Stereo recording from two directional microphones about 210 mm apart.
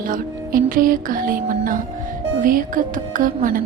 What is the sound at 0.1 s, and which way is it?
Music, 40° right (ahead or behind).